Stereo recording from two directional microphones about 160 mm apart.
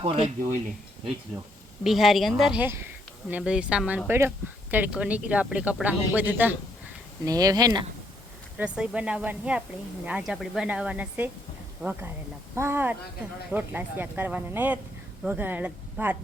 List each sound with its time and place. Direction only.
0.0 s speech: 35° right (ahead or behind)
1.8 s speech: centre (ahead or behind)
7.3 s speech: 20° right (ahead or behind)
8.5 s speech: 5° right (ahead or behind)